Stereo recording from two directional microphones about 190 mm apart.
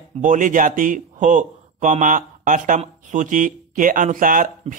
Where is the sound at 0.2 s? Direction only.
40° right (ahead or behind).